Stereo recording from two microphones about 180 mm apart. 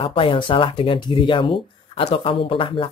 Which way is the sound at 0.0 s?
30° left (ahead or behind).